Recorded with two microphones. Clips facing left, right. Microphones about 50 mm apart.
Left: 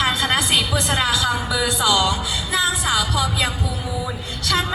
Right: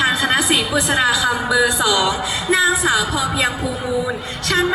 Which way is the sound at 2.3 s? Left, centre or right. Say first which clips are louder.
Right 6 dB; right.